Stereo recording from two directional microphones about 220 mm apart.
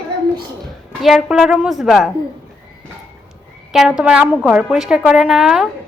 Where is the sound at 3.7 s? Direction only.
5° right (ahead or behind).